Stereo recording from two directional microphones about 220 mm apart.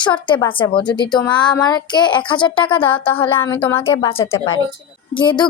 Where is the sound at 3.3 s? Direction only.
10° left (ahead or behind).